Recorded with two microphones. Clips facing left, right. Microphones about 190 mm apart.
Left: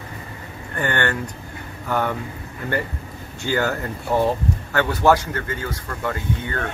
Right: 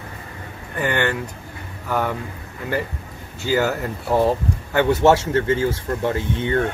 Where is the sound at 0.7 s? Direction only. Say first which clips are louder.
Right 1 dB; 5° right (ahead or behind).